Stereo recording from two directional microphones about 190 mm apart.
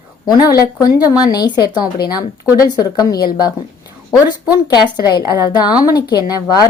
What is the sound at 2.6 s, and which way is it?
A woman's voice, 20° left (ahead or behind).